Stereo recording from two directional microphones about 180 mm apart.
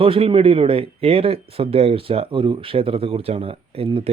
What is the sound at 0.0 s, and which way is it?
Speech, 30° right (ahead or behind).